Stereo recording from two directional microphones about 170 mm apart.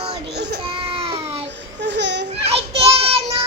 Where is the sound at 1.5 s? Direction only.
90° right.